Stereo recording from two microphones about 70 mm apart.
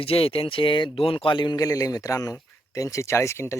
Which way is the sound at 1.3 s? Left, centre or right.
Left.